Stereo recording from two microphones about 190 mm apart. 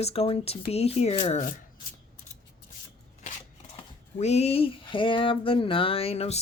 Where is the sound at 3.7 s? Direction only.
35° left (ahead or behind).